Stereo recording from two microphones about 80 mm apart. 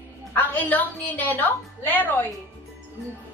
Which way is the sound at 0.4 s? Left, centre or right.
Left.